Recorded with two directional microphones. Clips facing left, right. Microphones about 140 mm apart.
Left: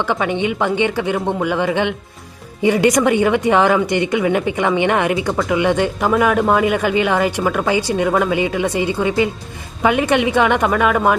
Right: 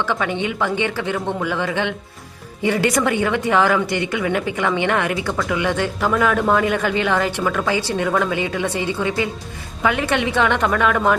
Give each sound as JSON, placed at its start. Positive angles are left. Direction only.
{"t": 0.0, "sound": "speech", "side_deg": 20}